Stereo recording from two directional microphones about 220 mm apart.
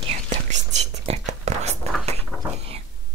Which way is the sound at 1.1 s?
30° right (ahead or behind).